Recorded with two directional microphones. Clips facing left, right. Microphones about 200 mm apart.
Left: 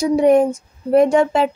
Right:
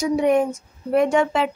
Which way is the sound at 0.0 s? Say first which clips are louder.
Left 5 dB; 35° left (ahead or behind).